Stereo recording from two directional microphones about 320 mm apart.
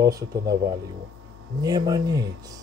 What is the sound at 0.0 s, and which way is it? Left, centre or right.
Speech, centre.